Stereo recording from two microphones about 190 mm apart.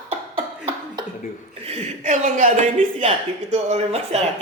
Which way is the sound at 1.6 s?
35° right (ahead or behind).